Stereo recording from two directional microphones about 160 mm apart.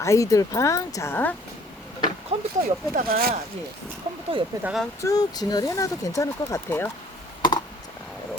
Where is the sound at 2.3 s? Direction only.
40° right (ahead or behind).